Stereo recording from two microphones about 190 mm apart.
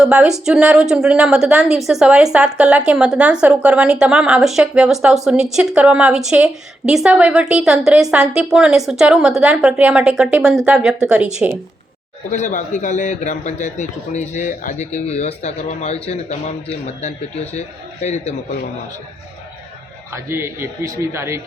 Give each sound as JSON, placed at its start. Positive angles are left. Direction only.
{"t": 0.0, "sound": "speech", "side_deg": -5}
{"t": 12.3, "sound": "a man's voice", "side_deg": 40}
{"t": 20.3, "sound": "a man's voice", "side_deg": -15}